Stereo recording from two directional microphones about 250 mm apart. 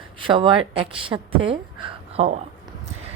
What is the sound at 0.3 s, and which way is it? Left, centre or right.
A woman's voice, centre.